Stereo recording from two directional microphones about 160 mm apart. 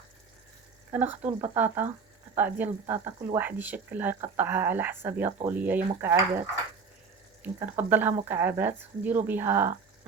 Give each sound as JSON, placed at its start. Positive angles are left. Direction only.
{"t": 0.9, "sound": "speech", "side_deg": -10}
{"t": 7.4, "sound": "speech", "side_deg": -10}